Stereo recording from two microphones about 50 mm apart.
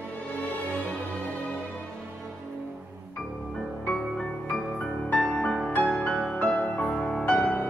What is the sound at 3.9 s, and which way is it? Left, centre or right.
Music, centre.